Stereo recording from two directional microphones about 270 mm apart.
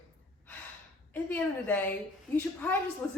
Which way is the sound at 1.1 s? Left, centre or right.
Centre.